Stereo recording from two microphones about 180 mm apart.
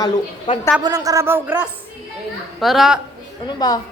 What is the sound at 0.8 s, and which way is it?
Speech, 20° right (ahead or behind).